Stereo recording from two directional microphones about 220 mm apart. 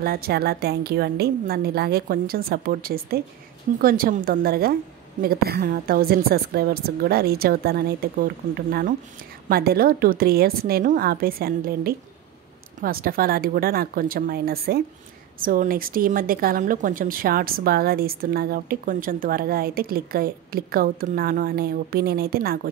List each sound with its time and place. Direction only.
0.0 s a woman's voice: 45° right (ahead or behind)